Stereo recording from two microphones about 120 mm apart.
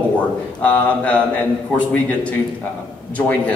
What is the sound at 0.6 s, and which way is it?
A man's voice, 10° left (ahead or behind).